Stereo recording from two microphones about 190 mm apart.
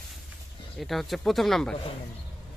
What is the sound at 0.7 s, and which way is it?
Speech, centre (ahead or behind).